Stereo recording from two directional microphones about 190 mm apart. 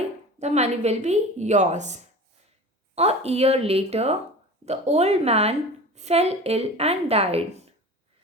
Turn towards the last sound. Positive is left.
turn(degrees=-35)  # may be behind; listen again after turning